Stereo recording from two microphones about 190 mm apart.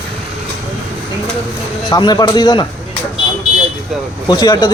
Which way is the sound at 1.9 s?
20° left (ahead or behind).